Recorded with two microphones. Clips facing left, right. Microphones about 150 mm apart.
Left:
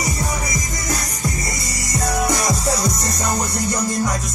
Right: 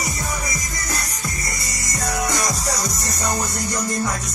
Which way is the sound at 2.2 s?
25° left (ahead or behind).